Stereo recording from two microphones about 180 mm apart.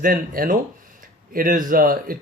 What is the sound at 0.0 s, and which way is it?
Speech, 50° right (ahead or behind).